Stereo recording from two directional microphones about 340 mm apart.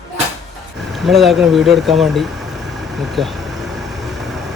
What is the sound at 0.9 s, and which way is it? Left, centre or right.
Speech, centre.